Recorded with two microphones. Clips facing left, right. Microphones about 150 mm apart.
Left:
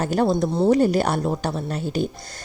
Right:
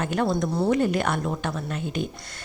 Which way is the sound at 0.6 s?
35° left (ahead or behind).